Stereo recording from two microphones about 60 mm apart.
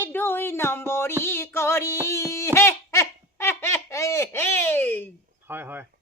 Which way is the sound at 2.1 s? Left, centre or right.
Left.